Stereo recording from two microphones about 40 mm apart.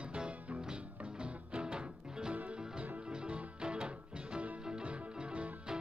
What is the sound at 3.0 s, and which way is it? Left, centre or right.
Music, right.